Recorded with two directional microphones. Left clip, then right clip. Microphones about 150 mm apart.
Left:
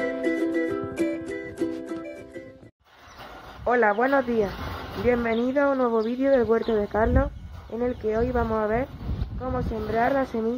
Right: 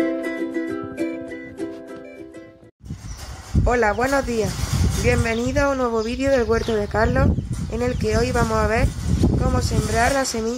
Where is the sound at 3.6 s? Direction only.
25° right (ahead or behind).